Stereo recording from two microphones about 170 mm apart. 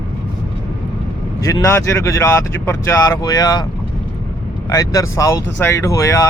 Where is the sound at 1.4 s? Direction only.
20° left (ahead or behind).